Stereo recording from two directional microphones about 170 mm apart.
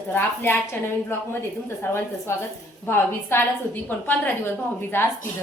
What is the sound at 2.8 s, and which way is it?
A woman's voice, 15° left (ahead or behind).